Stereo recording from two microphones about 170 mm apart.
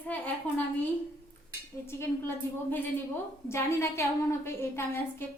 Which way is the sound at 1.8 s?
15° left (ahead or behind).